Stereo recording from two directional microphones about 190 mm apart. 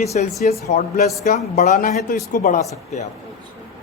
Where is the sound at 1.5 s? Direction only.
40° left (ahead or behind).